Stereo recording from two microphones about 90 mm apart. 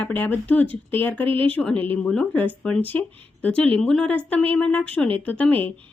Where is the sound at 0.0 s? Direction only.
20° left (ahead or behind).